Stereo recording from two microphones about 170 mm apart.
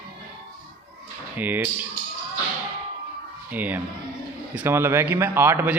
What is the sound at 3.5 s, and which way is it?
A man's voice, 10° right (ahead or behind).